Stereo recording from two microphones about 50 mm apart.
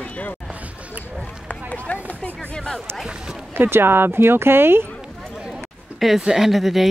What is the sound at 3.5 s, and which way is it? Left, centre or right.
Speech, right.